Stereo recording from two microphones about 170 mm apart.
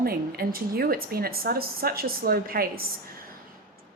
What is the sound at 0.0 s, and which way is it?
A woman's voice, 60° right (ahead or behind).